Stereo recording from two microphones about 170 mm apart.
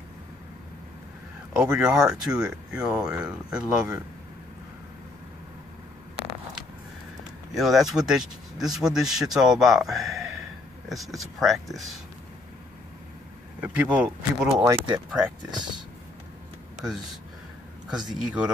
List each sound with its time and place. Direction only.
1.5 s speech: 5° right (ahead or behind)
7.5 s speech: centre (ahead or behind)
13.6 s speech: 10° right (ahead or behind)
14.6 s speech: 15° right (ahead or behind)
17.8 s speech: 5° right (ahead or behind)